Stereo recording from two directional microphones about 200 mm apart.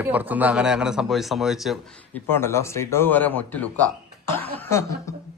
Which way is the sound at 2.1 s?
10° left (ahead or behind).